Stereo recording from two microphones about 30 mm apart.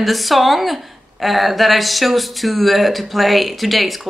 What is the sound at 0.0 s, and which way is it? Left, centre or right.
Speech, centre.